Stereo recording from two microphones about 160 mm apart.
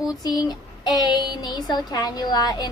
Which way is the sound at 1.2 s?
25° left (ahead or behind).